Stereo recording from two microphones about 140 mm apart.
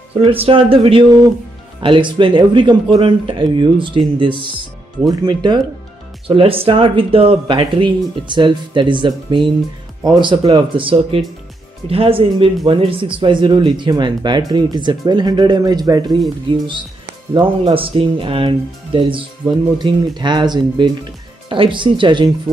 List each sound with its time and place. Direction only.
0.1 s speech: 45° right (ahead or behind)